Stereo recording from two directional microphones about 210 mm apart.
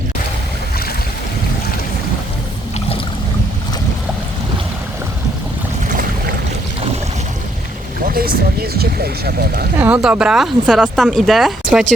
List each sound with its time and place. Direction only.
8.0 s speech: 45° right (ahead or behind)
9.7 s speech: 5° right (ahead or behind)